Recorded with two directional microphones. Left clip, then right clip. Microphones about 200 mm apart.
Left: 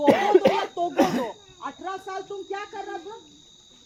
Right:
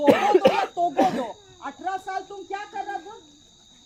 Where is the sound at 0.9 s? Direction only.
60° left (ahead or behind).